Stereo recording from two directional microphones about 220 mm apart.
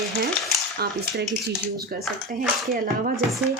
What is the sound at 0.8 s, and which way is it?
Speech, 45° right (ahead or behind).